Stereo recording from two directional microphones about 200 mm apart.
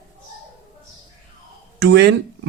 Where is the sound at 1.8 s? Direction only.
55° right (ahead or behind).